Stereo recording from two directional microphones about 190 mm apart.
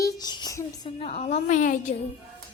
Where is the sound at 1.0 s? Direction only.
35° left (ahead or behind).